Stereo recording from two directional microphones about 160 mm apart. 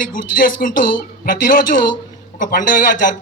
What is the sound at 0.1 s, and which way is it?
Speech, 60° left (ahead or behind).